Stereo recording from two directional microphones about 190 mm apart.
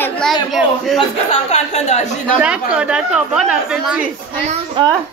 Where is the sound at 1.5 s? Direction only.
35° left (ahead or behind).